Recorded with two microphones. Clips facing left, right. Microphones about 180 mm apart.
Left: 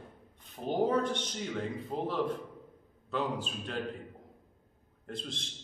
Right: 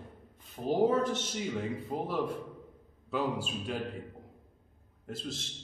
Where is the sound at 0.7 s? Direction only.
5° right (ahead or behind).